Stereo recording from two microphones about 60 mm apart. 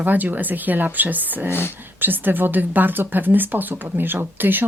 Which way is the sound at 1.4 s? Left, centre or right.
Left.